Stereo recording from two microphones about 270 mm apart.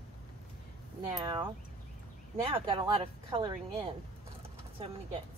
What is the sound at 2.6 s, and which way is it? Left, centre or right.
Speech, centre.